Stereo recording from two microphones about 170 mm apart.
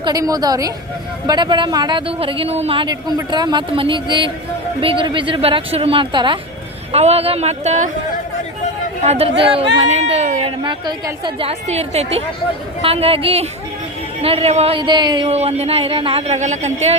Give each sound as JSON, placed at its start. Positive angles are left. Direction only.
{"t": 0.0, "sound": "speech", "side_deg": -20}
{"t": 9.0, "sound": "speech", "side_deg": -35}
{"t": 10.6, "sound": "speech", "side_deg": -25}